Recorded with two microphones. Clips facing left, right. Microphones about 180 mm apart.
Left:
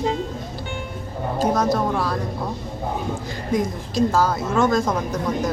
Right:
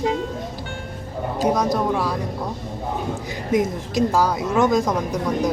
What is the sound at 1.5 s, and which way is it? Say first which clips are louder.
Speech: even; 15° right (ahead or behind).